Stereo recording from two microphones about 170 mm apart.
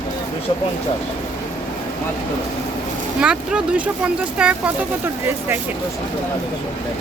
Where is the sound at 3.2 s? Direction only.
5° right (ahead or behind).